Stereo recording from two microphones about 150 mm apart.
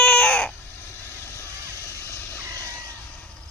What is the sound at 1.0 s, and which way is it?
Vehicle, 20° left (ahead or behind).